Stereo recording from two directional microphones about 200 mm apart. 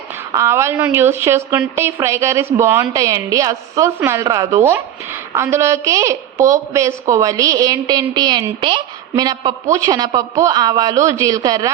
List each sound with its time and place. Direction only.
0.3 s a woman's voice: 15° right (ahead or behind)